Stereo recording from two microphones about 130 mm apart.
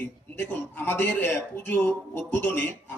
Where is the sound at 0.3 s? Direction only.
15° left (ahead or behind).